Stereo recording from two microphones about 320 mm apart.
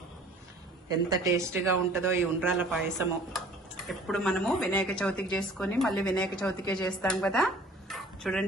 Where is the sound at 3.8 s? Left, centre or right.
Centre.